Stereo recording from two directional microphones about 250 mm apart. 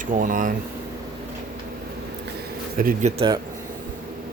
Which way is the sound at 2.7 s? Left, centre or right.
Right.